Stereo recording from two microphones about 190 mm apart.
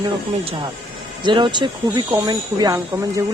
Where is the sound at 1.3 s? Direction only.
25° right (ahead or behind).